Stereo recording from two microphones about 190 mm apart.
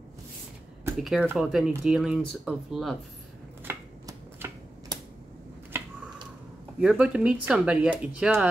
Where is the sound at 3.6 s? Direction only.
15° right (ahead or behind).